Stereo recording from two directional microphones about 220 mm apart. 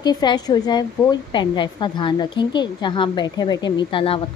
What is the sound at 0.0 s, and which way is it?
A woman's voice, 20° left (ahead or behind).